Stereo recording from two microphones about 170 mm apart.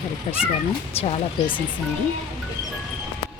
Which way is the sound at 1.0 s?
35° left (ahead or behind).